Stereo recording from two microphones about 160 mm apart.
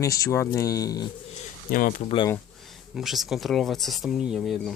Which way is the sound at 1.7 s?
55° left (ahead or behind).